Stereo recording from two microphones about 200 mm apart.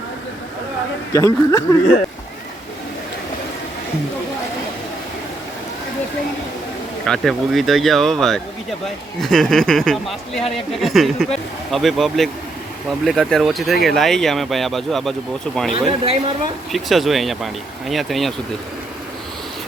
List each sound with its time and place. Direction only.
1.1 s speech: 15° left (ahead or behind)
7.1 s speech: centre (ahead or behind)
15.7 s speech: 30° right (ahead or behind)
16.7 s speech: centre (ahead or behind)